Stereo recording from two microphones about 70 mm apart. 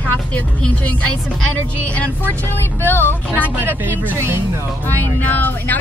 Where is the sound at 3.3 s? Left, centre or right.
Right.